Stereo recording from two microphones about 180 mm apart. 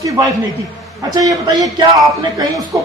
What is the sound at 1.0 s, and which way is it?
A man's voice, 20° right (ahead or behind).